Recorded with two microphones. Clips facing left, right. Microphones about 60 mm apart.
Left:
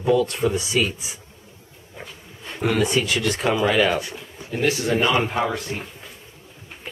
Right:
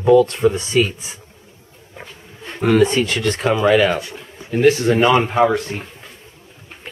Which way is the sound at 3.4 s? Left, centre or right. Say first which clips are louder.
Right 5 dB; centre.